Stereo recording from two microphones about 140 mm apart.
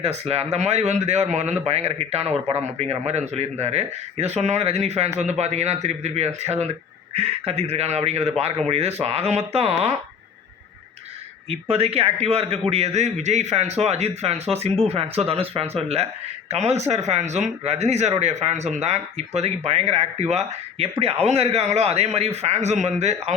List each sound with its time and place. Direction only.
0.0 s a man's voice: 50° right (ahead or behind)
11.4 s a man's voice: 45° right (ahead or behind)